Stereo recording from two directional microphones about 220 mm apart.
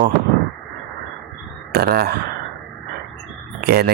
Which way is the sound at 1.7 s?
45° right (ahead or behind).